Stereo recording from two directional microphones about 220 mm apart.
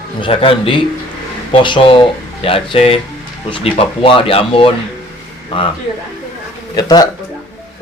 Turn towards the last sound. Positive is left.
turn(degrees=15)  # may be behind; listen again after turning